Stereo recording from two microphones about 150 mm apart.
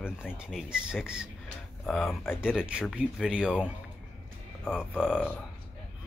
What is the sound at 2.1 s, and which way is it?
Speech, 15° left (ahead or behind).